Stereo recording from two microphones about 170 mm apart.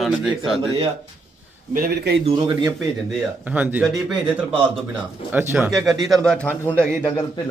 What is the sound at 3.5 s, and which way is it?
Speech, 10° right (ahead or behind).